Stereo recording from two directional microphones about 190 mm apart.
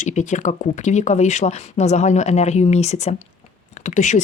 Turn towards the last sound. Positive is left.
turn(degrees=40)  # may be behind; listen again after turning